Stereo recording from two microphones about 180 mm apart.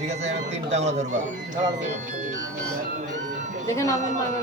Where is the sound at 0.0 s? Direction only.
40° right (ahead or behind).